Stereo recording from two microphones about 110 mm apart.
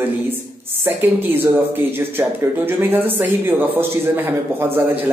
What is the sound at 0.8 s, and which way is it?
A woman's voice, 20° right (ahead or behind).